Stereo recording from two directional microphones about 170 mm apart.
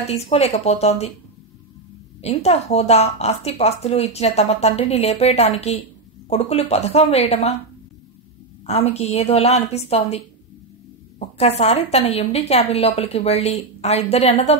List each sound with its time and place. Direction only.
0.1 s a woman's voice: 40° left (ahead or behind)
2.2 s a woman's voice: 40° left (ahead or behind)
8.6 s a woman's voice: 40° left (ahead or behind)